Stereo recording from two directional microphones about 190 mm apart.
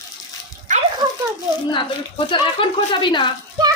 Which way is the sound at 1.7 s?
25° left (ahead or behind).